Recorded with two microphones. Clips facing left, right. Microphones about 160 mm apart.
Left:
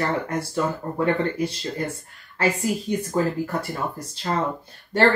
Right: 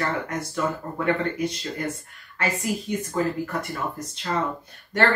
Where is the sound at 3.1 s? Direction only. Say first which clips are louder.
Left 2 dB; 30° left (ahead or behind).